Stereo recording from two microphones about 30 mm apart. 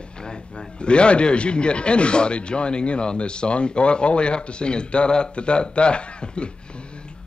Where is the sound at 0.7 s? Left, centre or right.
Left.